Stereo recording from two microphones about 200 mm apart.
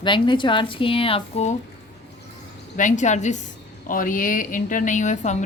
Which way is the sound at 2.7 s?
40° left (ahead or behind).